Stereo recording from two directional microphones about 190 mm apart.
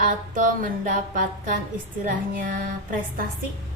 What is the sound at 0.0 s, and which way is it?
A woman's voice, 45° right (ahead or behind).